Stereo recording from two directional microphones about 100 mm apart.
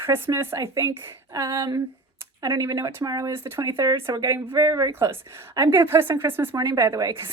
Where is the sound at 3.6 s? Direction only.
35° right (ahead or behind).